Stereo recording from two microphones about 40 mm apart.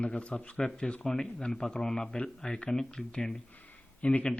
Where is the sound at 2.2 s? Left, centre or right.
Centre.